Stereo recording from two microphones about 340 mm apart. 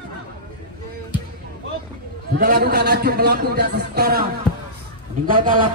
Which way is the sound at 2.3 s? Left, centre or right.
Right.